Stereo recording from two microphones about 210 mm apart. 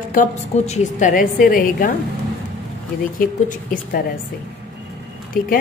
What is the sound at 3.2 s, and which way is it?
Speech, 40° left (ahead or behind).